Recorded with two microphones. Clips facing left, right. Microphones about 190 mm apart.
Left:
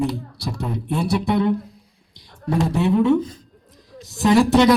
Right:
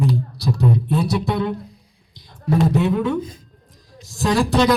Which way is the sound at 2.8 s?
30° left (ahead or behind).